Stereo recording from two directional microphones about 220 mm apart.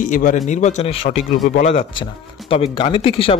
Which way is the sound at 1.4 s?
35° left (ahead or behind).